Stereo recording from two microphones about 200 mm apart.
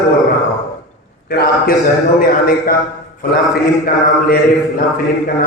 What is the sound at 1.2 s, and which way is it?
A man's voice, 45° left (ahead or behind).